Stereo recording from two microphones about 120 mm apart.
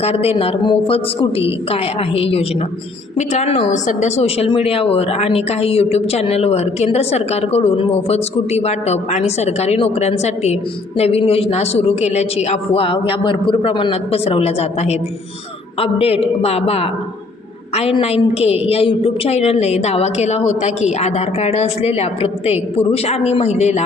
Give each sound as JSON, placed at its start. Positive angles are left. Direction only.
{"t": 0.0, "sound": "a woman's voice", "side_deg": 55}
{"t": 3.2, "sound": "a woman's voice", "side_deg": 65}
{"t": 18.0, "sound": "a woman's voice", "side_deg": 60}